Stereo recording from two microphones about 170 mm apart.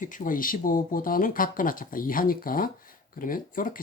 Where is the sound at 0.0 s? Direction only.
50° left (ahead or behind).